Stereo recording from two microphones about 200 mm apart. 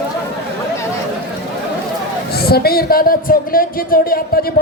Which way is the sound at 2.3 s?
50° left (ahead or behind).